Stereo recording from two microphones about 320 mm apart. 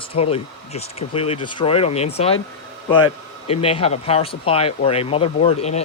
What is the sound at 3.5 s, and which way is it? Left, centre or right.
Speech, centre.